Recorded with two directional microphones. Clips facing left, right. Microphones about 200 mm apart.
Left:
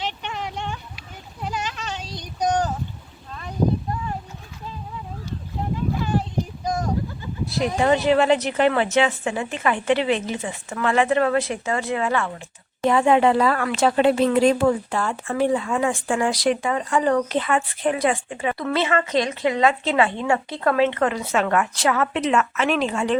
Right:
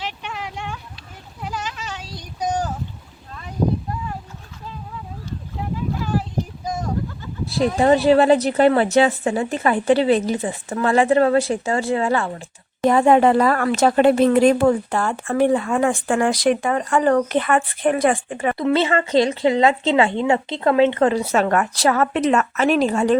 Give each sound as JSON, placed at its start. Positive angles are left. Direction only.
{"t": 0.0, "sound": "a sound", "side_deg": -5}
{"t": 7.8, "sound": "speech", "side_deg": -35}
{"t": 18.5, "sound": "speech", "side_deg": -25}